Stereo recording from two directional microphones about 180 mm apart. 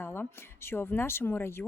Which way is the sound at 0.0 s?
15° left (ahead or behind).